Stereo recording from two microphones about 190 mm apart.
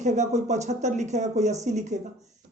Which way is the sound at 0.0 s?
40° right (ahead or behind).